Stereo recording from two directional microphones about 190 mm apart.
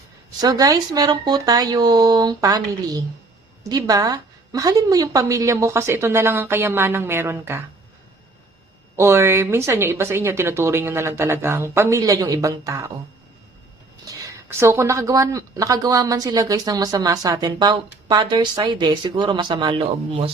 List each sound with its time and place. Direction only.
0.3 s a woman's voice: 20° right (ahead or behind)
9.0 s a woman's voice: 15° right (ahead or behind)
14.6 s a woman's voice: 15° right (ahead or behind)